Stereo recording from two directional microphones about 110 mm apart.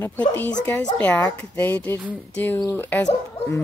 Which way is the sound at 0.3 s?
15° left (ahead or behind).